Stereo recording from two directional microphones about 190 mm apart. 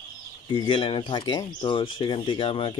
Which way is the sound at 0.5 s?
25° left (ahead or behind).